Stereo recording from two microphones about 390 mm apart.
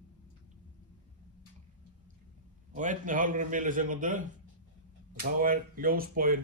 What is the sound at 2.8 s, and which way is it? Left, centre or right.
Speech, centre.